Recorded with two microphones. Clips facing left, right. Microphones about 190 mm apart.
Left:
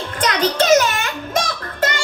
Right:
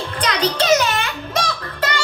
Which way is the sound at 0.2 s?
50° left (ahead or behind).